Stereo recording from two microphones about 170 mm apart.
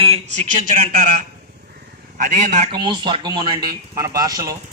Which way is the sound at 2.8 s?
30° right (ahead or behind).